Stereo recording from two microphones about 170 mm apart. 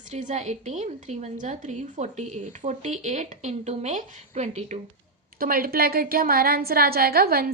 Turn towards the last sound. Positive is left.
turn(degrees=-60)  # may be behind; listen again after turning